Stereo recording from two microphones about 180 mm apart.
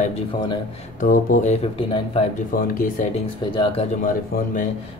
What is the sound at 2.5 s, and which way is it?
Speech, 50° left (ahead or behind).